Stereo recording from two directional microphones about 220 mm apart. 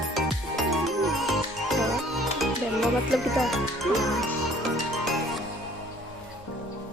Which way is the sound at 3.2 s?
Centre (ahead or behind).